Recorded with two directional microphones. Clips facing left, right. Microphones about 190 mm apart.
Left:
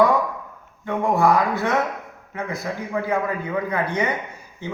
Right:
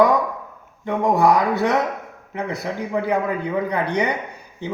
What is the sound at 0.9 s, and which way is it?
Speech, 20° right (ahead or behind).